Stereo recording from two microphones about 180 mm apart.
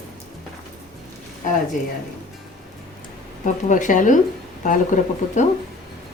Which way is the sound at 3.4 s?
45° left (ahead or behind).